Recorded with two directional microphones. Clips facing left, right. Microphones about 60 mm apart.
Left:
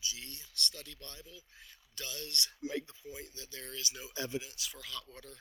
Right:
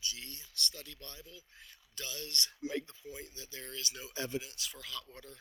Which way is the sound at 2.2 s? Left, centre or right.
Right.